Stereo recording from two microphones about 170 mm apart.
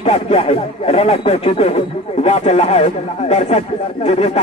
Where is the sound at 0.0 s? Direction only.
35° left (ahead or behind).